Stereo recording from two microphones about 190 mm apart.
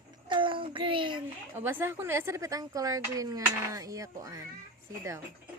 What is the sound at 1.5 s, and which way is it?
Speech, 10° right (ahead or behind).